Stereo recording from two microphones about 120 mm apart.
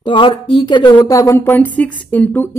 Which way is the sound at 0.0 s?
40° left (ahead or behind).